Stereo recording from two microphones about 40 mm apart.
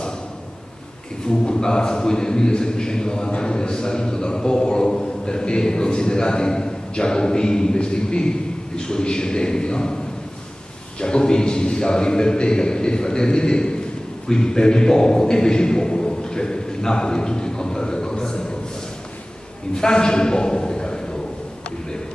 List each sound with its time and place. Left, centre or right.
1.2 s a man's voice: centre
11.0 s a man's voice: left
19.7 s a man's voice: centre